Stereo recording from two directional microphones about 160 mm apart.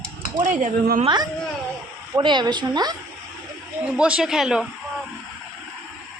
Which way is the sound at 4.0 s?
5° right (ahead or behind).